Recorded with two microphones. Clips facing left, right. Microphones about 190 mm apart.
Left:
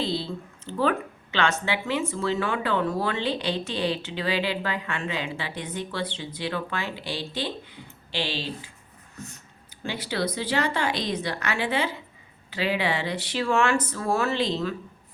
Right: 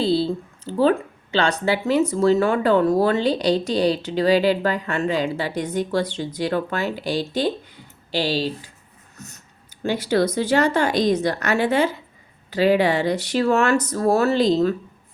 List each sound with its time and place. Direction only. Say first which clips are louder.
0.0 s speech: right 8 dB; 35° right (ahead or behind)
9.1 s a sound: left 1 dB; 40° right (ahead or behind)
9.8 s a woman's voice: right 9 dB; 45° right (ahead or behind)